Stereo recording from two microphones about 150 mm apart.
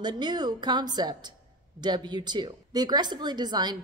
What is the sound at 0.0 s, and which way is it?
A woman's voice, 30° right (ahead or behind).